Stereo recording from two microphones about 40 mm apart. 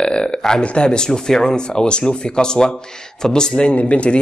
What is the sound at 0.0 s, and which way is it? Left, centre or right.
Speech, left.